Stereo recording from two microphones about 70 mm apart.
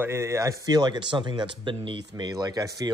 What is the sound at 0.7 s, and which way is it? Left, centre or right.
Speech, right.